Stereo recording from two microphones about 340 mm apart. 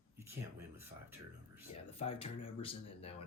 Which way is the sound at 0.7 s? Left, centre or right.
Centre.